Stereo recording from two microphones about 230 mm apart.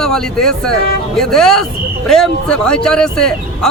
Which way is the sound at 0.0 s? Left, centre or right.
Centre.